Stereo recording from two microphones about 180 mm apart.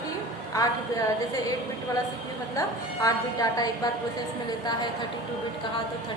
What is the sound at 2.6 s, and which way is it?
A woman's voice, 20° left (ahead or behind).